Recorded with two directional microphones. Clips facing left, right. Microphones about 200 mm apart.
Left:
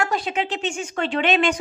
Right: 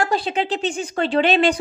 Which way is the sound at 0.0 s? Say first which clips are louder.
Right 3 dB; 30° right (ahead or behind).